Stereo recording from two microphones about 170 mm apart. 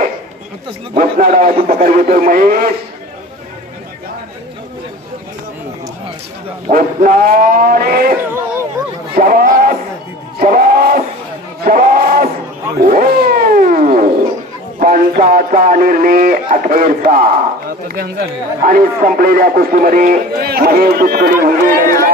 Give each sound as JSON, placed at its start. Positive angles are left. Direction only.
{"t": 0.9, "sound": "speech", "side_deg": -55}
{"t": 6.7, "sound": "speech", "side_deg": -55}
{"t": 9.1, "sound": "a sound", "side_deg": -55}
{"t": 12.8, "sound": "cat", "side_deg": -60}
{"t": 14.8, "sound": "speech", "side_deg": -60}